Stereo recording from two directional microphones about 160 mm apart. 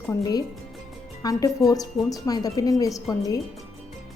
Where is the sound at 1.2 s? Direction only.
25° left (ahead or behind).